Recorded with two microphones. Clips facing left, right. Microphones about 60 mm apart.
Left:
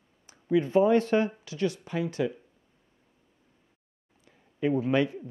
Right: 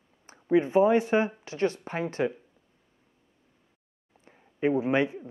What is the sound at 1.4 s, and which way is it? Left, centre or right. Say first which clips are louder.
Speech: right 2 dB; right.